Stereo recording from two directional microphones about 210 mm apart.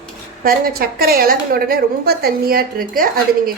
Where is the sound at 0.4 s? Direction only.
45° right (ahead or behind).